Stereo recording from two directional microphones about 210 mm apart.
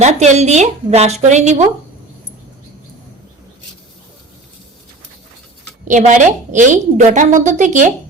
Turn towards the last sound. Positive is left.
turn(degrees=-35)  # may be behind; listen again after turning